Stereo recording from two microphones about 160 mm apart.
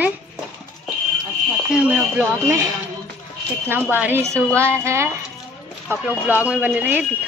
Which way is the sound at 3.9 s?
10° right (ahead or behind).